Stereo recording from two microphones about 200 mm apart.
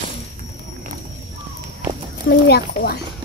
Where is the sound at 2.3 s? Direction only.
50° left (ahead or behind).